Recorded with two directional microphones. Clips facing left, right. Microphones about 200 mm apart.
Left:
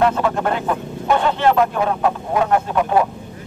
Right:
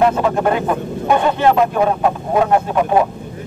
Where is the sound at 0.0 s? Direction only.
15° right (ahead or behind).